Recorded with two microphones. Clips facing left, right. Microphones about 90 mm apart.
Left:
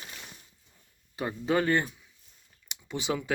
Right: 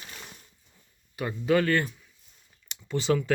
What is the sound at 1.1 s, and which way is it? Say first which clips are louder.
Speech: right 3 dB; 25° left (ahead or behind).